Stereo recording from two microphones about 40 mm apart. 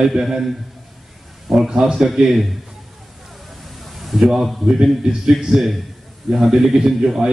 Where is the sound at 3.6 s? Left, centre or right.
Centre.